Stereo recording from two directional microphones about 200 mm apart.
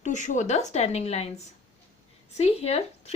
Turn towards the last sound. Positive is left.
turn(degrees=30)  # may be behind; listen again after turning